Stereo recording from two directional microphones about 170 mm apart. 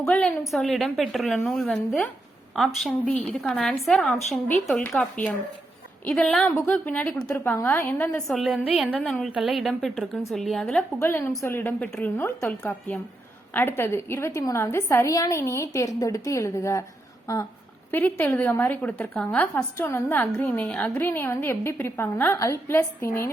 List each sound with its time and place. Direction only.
0.0 s a woman's voice: 5° left (ahead or behind)
11.0 s a woman's voice: 15° left (ahead or behind)
17.9 s a woman's voice: 10° left (ahead or behind)